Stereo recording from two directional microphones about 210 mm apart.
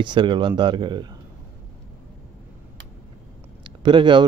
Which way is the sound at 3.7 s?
20° right (ahead or behind).